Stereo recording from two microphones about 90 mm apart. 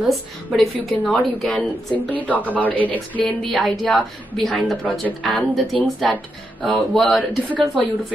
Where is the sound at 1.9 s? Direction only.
15° left (ahead or behind).